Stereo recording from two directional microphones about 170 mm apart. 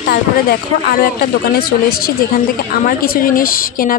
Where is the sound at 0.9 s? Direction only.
60° left (ahead or behind).